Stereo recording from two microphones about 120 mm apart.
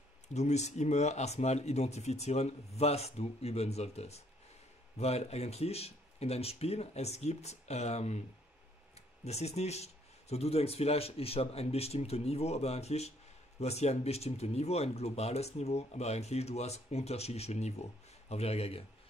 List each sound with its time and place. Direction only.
0.3 s speech: 70° left (ahead or behind)